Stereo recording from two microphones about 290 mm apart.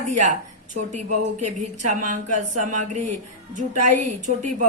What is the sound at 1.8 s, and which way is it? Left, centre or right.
Speech, right.